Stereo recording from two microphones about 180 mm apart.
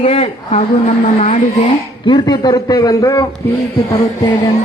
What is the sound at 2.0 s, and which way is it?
A man's voice, 25° left (ahead or behind).